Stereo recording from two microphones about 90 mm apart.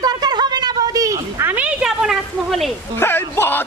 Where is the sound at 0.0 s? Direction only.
50° right (ahead or behind).